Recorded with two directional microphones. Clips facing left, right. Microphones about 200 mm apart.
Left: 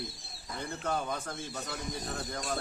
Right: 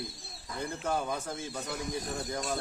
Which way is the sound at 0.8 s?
10° right (ahead or behind).